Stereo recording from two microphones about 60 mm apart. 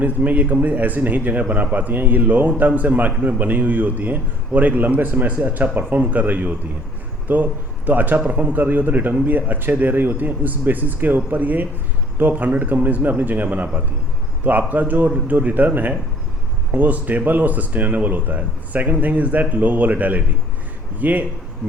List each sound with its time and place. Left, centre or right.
0.0 s a man's voice: right